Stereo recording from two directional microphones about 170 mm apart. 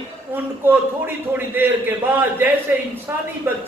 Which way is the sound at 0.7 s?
10° right (ahead or behind).